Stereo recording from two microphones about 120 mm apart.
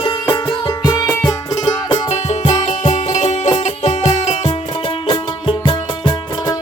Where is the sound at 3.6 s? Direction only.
65° left (ahead or behind).